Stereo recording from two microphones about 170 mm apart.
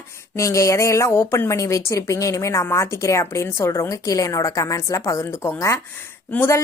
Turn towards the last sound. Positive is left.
turn(degrees=10)  # may be behind; listen again after turning